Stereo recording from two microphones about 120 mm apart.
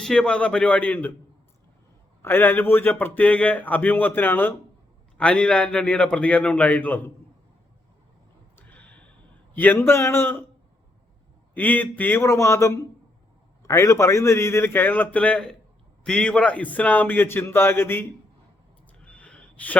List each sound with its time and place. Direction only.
0.0 s a man's voice: 5° left (ahead or behind)
2.2 s a man's voice: 15° left (ahead or behind)
8.5 s gasp: 10° left (ahead or behind)
9.6 s a man's voice: 15° left (ahead or behind)
11.5 s a man's voice: 15° left (ahead or behind)
19.0 s a sound: 10° left (ahead or behind)